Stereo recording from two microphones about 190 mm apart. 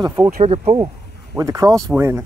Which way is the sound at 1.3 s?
15° right (ahead or behind).